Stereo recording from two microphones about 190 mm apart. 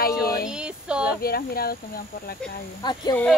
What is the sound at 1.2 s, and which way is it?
Speech, 50° left (ahead or behind).